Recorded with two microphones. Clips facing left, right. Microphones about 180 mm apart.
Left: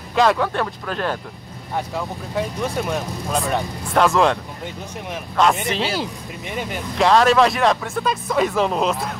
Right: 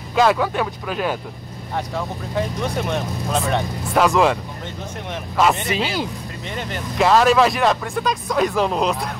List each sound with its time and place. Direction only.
0.1 s speech: 5° right (ahead or behind)
5.4 s speech: centre (ahead or behind)
7.0 s speech: centre (ahead or behind)